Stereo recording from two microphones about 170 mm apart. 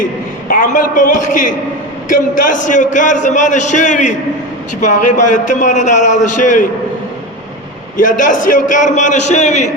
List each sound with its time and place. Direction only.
0.0 s a man's voice: 55° left (ahead or behind)
7.9 s a man's voice: 50° left (ahead or behind)